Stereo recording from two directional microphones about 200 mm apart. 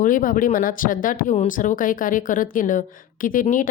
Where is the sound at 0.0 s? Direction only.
45° left (ahead or behind).